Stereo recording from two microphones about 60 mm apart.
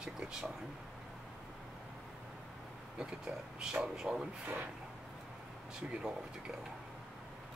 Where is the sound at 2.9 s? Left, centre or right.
Centre.